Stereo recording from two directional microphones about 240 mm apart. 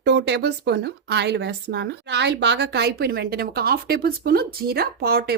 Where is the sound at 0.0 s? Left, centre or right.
Right.